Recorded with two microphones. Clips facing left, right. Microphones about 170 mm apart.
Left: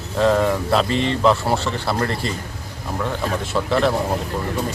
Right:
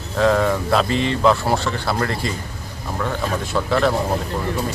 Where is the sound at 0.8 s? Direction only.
35° left (ahead or behind).